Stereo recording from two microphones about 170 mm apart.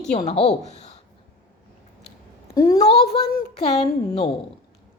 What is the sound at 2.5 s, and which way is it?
Speech, 20° left (ahead or behind).